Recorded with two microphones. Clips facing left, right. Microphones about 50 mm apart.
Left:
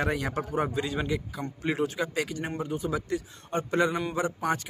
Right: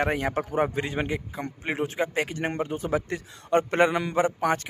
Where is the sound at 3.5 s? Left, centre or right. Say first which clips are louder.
Right 5 dB; right.